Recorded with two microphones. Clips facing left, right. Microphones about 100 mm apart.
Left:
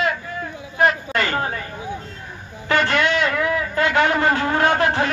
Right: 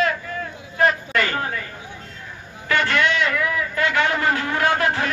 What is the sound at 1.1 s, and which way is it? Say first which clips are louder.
Speech: left 1 dB; 30° left (ahead or behind).